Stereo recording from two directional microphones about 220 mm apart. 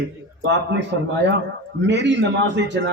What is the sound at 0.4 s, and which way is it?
A man's voice, 50° right (ahead or behind).